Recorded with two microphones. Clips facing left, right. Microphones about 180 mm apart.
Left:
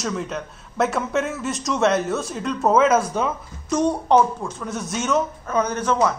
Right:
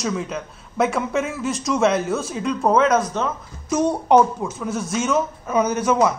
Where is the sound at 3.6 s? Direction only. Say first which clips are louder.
Right 1 dB; 5° right (ahead or behind).